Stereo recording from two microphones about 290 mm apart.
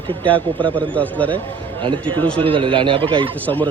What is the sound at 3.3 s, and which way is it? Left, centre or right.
Speech, centre.